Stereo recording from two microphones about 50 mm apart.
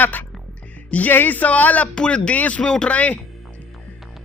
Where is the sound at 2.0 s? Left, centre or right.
Left.